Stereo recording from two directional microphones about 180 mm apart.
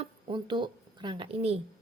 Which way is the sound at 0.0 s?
30° right (ahead or behind).